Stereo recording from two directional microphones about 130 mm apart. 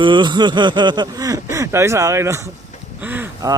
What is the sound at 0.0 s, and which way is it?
Speech, 35° right (ahead or behind).